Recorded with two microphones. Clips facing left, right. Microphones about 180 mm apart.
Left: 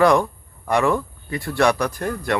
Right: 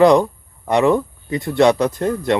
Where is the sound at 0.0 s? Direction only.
20° right (ahead or behind).